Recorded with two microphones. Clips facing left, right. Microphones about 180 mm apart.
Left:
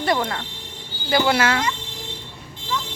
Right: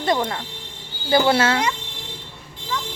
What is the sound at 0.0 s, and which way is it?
Speech, 20° right (ahead or behind).